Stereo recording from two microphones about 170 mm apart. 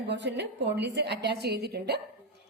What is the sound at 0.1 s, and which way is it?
A woman's voice, 90° right.